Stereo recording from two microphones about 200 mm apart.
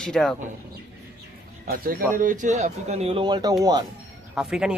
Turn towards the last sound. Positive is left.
turn(degrees=-5)  # may be behind; listen again after turning